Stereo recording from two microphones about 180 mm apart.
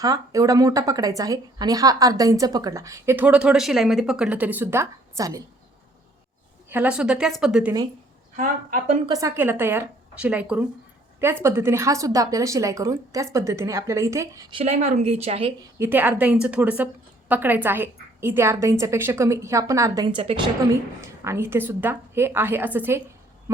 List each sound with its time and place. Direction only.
0.0 s speech: 20° right (ahead or behind)
6.7 s a woman's voice: 10° right (ahead or behind)
8.4 s a woman's voice: 45° right (ahead or behind)
9.0 s speech: 20° right (ahead or behind)
14.6 s speech: 40° right (ahead or behind)
15.8 s speech: 10° right (ahead or behind); by 20.5 s 25° right (ahead or behind)
21.2 s speech: 15° right (ahead or behind)